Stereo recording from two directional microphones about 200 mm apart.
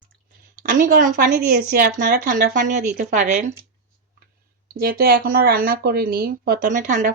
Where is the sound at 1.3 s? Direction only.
50° right (ahead or behind).